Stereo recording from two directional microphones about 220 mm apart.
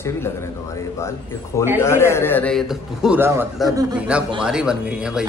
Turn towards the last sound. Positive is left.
turn(degrees=-5)  # may be behind; listen again after turning